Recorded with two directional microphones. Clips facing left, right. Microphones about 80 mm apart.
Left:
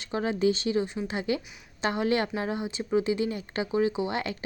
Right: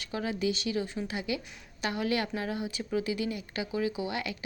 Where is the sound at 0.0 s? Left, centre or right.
Left.